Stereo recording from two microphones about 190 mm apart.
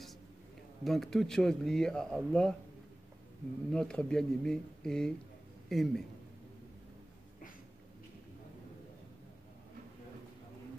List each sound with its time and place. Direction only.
0.8 s speech: centre (ahead or behind)
3.7 s speech: 5° left (ahead or behind)